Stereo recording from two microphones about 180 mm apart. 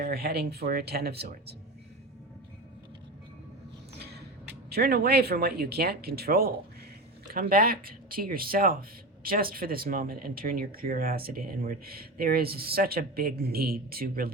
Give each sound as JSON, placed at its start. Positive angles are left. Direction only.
{"t": 0.0, "sound": "speech", "side_deg": -60}
{"t": 3.9, "sound": "creak", "side_deg": -65}
{"t": 4.7, "sound": "speech", "side_deg": -55}